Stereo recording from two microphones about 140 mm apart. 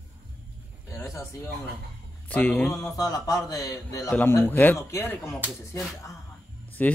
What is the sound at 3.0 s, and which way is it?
A man's voice, 25° left (ahead or behind).